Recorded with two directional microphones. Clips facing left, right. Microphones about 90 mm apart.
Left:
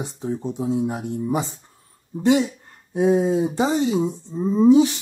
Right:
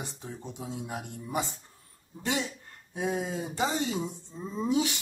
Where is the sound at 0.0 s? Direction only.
35° left (ahead or behind).